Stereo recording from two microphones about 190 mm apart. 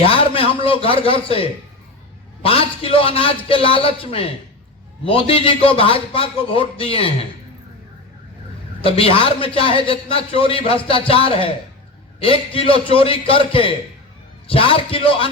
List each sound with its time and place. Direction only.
0.0 s a man's voice: 30° left (ahead or behind)
8.8 s speech: 30° left (ahead or behind)